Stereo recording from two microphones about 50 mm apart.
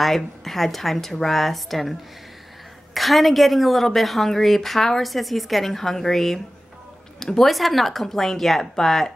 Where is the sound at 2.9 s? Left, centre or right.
Centre.